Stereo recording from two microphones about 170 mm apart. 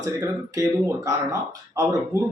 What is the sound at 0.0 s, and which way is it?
Speech, 20° right (ahead or behind).